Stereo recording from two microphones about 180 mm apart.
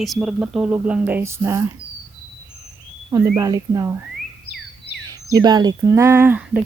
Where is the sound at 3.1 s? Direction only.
15° right (ahead or behind).